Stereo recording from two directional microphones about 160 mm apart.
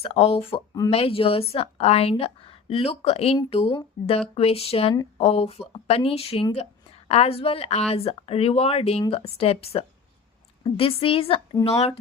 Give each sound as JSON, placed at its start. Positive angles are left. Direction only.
{"t": 0.0, "sound": "speech", "side_deg": 35}